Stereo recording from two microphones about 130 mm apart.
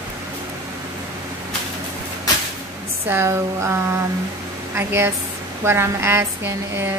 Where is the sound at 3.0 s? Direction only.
20° right (ahead or behind).